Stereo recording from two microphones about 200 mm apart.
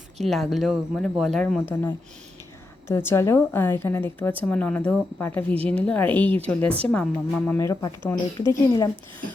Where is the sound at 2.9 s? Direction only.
10° left (ahead or behind).